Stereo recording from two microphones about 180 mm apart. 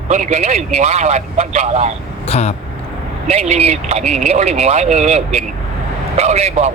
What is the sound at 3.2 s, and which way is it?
Speech, 35° right (ahead or behind).